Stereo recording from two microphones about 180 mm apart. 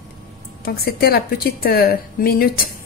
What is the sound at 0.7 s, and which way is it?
A woman's voice, 60° left (ahead or behind).